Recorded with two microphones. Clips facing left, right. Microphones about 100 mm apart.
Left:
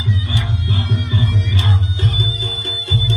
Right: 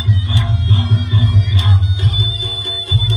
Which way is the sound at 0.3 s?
20° right (ahead or behind).